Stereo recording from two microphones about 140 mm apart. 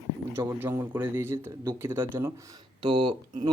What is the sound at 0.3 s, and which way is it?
Speech, 20° right (ahead or behind).